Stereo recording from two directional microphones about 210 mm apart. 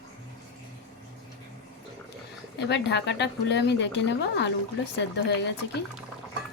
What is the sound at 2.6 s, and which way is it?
Speech, 55° left (ahead or behind).